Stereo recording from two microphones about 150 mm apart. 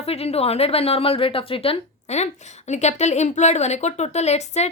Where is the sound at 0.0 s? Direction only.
40° left (ahead or behind).